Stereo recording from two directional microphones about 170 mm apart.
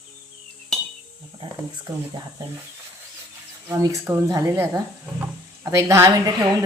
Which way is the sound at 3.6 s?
15° right (ahead or behind).